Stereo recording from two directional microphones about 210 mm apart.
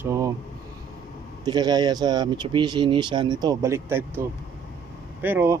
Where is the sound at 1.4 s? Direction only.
20° right (ahead or behind).